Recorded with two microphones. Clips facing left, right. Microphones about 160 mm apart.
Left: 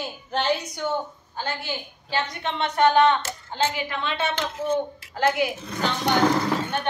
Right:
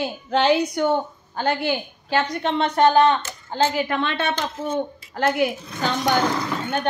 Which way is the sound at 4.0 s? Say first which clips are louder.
Right 3 dB; 60° right (ahead or behind).